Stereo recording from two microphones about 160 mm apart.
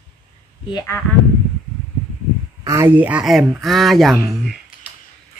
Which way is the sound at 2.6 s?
20° right (ahead or behind).